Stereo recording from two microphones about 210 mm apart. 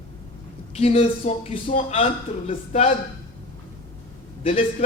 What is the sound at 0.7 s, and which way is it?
A man's voice, 30° left (ahead or behind).